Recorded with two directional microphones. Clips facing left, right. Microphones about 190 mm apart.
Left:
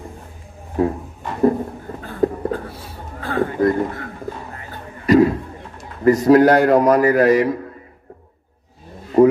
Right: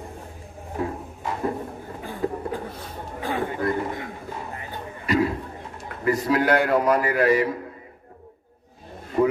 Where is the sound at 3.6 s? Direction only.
40° left (ahead or behind).